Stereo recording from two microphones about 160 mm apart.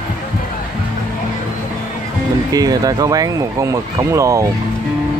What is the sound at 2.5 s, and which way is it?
Speech, 25° right (ahead or behind).